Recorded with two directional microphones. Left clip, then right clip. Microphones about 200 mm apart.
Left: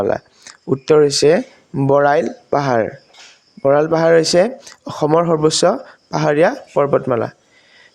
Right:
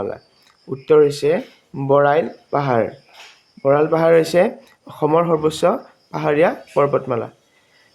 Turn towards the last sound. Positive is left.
turn(degrees=35)  # may be behind; listen again after turning